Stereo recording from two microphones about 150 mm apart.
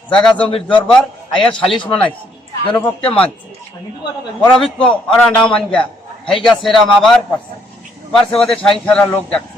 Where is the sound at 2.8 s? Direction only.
10° left (ahead or behind).